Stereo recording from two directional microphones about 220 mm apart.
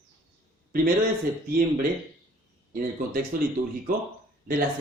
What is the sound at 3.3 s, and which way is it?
Speech, 40° right (ahead or behind).